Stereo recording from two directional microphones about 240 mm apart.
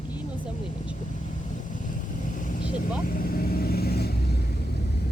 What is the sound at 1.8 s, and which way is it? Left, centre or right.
Vehicle, left.